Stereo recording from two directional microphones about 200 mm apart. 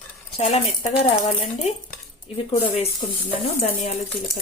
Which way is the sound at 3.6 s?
35° left (ahead or behind).